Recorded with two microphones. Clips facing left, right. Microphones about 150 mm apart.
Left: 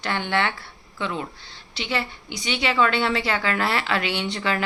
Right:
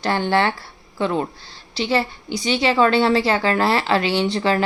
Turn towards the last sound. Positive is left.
turn(degrees=-35)  # may be behind; listen again after turning